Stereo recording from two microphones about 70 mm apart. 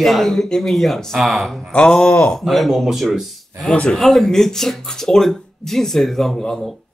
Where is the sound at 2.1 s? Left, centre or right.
Left.